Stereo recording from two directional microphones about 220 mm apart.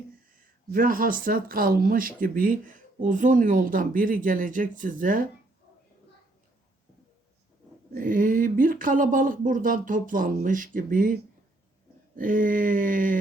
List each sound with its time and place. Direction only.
0.7 s speech: 40° right (ahead or behind)
7.9 s speech: 40° right (ahead or behind)
12.1 s speech: 40° right (ahead or behind)